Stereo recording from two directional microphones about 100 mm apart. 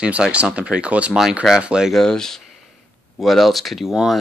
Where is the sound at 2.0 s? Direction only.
5° left (ahead or behind).